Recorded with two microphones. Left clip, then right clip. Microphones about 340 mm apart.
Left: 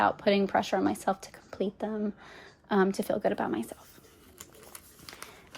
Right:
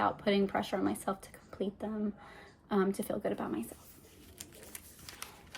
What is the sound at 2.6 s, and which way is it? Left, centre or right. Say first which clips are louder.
Speech: left 6 dB; left.